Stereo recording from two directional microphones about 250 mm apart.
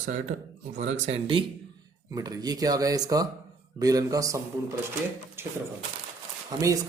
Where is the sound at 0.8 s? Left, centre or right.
Right; by 5.5 s centre.